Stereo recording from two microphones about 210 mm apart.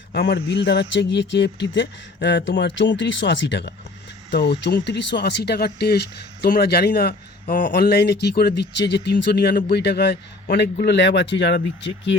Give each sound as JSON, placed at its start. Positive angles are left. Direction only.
{"t": 0.1, "sound": "speech", "side_deg": 45}